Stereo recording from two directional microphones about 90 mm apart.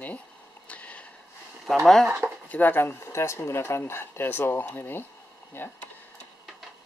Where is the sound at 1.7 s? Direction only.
5° left (ahead or behind).